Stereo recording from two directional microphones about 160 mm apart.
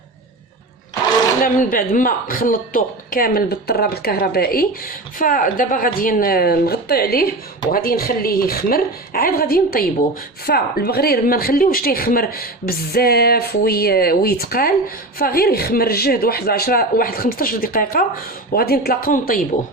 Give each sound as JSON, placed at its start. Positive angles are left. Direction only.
{"t": 1.4, "sound": "speech", "side_deg": 60}
{"t": 18.5, "sound": "speech", "side_deg": 75}